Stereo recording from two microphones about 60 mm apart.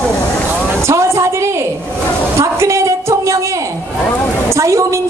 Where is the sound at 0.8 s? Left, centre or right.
Right.